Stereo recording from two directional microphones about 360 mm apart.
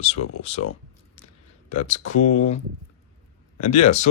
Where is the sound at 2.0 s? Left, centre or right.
Left.